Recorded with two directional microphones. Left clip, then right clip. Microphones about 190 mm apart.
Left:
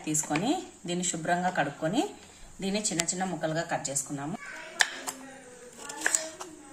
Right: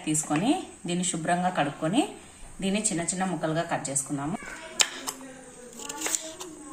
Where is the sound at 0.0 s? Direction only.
5° left (ahead or behind).